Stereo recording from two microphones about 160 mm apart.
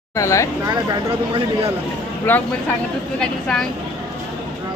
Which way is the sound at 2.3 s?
10° left (ahead or behind).